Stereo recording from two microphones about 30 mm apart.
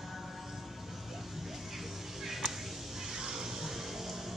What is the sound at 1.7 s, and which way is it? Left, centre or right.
Music, centre.